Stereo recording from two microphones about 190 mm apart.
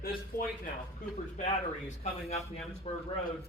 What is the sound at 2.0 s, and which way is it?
A man's voice, 35° left (ahead or behind).